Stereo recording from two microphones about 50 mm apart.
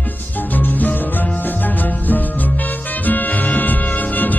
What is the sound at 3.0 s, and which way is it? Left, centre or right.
Music, left.